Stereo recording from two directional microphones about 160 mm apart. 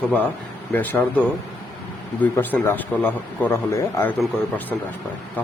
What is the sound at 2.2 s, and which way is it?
A man's voice, 10° left (ahead or behind).